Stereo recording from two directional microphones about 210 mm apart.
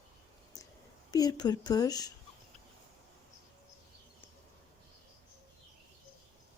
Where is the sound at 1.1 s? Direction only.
20° left (ahead or behind).